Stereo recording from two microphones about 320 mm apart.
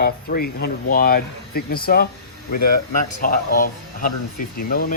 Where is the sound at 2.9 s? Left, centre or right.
Left.